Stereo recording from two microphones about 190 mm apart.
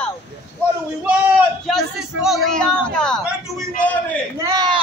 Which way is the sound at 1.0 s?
5° right (ahead or behind).